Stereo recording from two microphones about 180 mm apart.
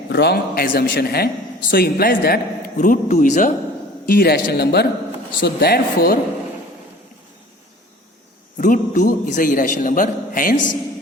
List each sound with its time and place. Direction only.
0.1 s a man's voice: 65° left (ahead or behind)
8.5 s a man's voice: 50° left (ahead or behind)